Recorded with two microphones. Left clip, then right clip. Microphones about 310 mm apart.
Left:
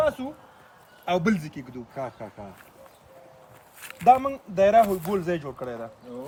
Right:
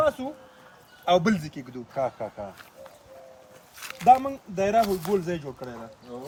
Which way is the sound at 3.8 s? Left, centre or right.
Centre.